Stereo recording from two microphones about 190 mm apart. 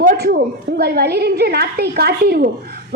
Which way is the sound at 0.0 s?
50° right (ahead or behind).